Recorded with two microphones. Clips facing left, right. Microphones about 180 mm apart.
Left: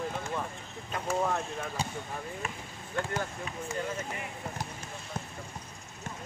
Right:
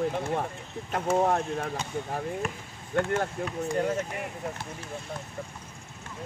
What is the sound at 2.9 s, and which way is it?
Speech, 60° right (ahead or behind).